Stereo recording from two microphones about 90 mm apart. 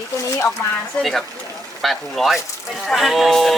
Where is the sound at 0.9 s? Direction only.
15° left (ahead or behind).